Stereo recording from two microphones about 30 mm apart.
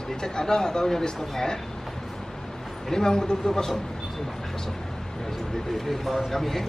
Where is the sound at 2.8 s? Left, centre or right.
Left.